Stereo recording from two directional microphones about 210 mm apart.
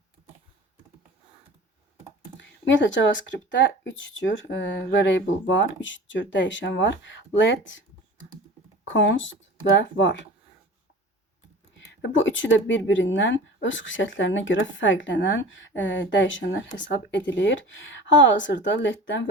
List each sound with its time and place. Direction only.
2.4 s speech: 60° left (ahead or behind)
8.9 s speech: 65° left (ahead or behind)
11.8 s speech: 60° left (ahead or behind)